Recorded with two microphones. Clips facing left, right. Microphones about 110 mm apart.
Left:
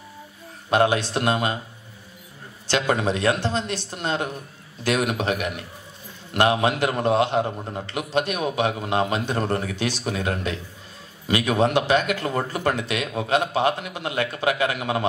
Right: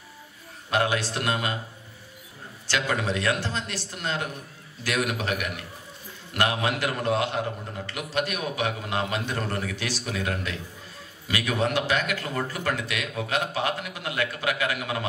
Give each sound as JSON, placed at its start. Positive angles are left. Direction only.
{"t": 0.7, "sound": "a man's voice", "side_deg": 25}
{"t": 2.7, "sound": "a man's voice", "side_deg": 25}